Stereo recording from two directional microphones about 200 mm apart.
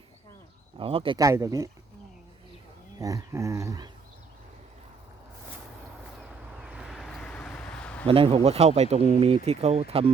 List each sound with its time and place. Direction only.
0.8 s speech: 25° right (ahead or behind)
3.0 s speech: 15° right (ahead or behind)
6.6 s a sound: 5° right (ahead or behind)
8.0 s speech: 25° right (ahead or behind)